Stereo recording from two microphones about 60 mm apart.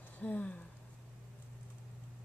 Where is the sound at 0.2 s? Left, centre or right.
Left.